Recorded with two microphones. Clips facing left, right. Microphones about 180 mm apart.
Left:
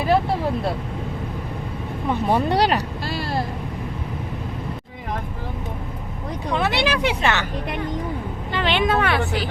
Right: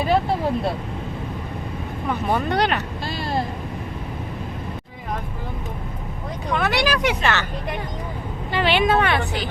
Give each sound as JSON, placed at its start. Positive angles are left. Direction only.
{"t": 2.0, "sound": "speech", "side_deg": 30}
{"t": 6.5, "sound": "speech", "side_deg": 25}
{"t": 8.5, "sound": "speech", "side_deg": -5}